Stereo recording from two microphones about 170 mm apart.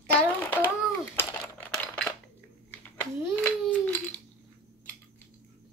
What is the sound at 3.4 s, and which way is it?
Babbling, 10° left (ahead or behind).